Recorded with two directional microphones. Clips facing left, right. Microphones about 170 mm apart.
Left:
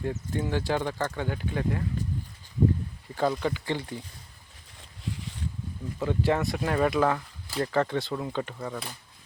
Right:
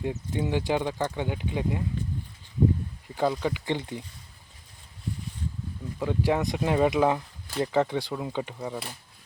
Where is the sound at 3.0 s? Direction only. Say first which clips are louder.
Even; 15° right (ahead or behind).